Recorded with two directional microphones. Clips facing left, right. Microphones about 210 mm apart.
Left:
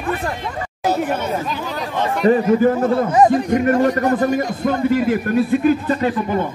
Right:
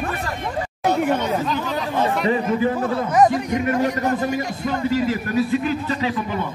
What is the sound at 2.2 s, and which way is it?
Speech, 45° left (ahead or behind).